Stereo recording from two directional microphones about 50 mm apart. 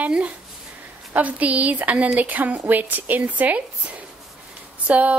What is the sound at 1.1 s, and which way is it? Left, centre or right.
A woman's voice, right.